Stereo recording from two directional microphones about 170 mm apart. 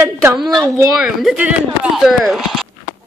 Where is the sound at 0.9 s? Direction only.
Centre (ahead or behind).